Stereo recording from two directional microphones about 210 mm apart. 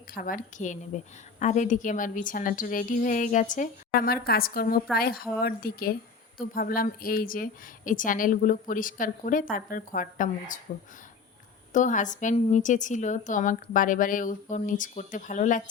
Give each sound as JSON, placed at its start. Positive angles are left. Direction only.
{"t": 0.1, "sound": "a woman's voice", "side_deg": 40}
{"t": 11.7, "sound": "a woman's voice", "side_deg": 35}